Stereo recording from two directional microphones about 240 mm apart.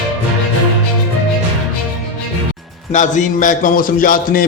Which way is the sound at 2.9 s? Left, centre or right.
Left.